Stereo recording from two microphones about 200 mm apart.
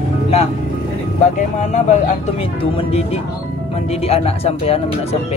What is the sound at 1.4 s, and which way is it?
Speech, 40° left (ahead or behind).